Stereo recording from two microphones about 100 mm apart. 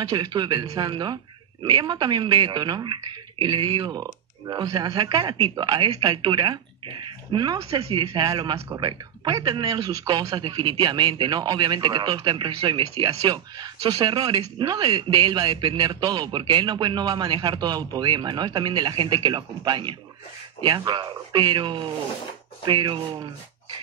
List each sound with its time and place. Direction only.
0.1 s a man's voice: 45° right (ahead or behind)
4.0 s a man's voice: 40° right (ahead or behind)
7.8 s speech: 70° right (ahead or behind)
8.2 s a man's voice: 50° right (ahead or behind)
13.2 s a man's voice: 40° right (ahead or behind); by 22.9 s 55° right (ahead or behind)